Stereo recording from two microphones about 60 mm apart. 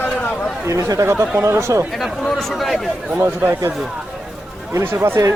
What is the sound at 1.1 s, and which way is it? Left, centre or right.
Speech, right.